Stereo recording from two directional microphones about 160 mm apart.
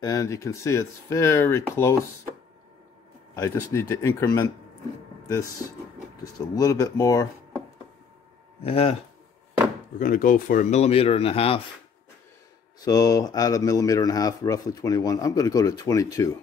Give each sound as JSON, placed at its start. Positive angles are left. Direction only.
{"t": 0.0, "sound": "speech", "side_deg": 20}
{"t": 3.3, "sound": "speech", "side_deg": 20}
{"t": 6.2, "sound": "speech", "side_deg": 20}
{"t": 8.6, "sound": "speech", "side_deg": 40}
{"t": 9.9, "sound": "speech", "side_deg": 55}
{"t": 12.8, "sound": "speech", "side_deg": 20}